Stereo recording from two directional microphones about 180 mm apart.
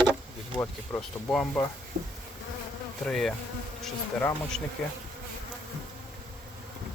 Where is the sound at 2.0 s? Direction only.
50° right (ahead or behind).